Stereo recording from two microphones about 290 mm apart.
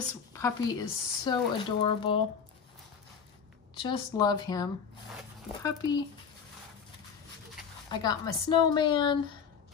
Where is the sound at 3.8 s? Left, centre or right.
Centre.